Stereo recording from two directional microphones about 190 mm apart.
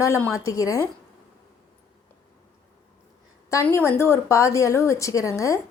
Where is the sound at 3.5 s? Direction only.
15° left (ahead or behind).